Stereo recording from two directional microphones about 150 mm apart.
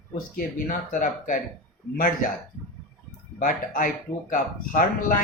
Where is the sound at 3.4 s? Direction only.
60° left (ahead or behind).